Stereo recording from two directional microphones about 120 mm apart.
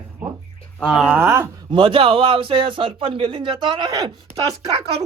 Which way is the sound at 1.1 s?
20° right (ahead or behind).